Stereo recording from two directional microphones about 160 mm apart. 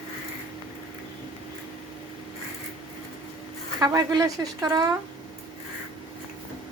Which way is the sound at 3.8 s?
25° right (ahead or behind).